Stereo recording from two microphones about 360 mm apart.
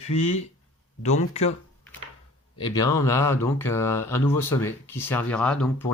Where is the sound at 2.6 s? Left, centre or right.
Centre.